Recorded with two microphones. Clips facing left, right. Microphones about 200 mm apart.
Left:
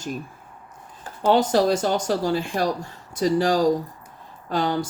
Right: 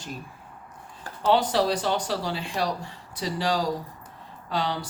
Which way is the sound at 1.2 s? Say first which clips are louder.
Left 4 dB; 45° left (ahead or behind).